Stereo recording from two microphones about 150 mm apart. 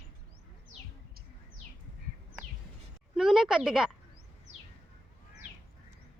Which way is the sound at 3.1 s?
Centre (ahead or behind).